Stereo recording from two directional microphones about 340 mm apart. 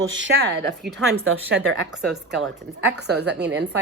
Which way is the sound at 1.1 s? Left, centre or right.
Right.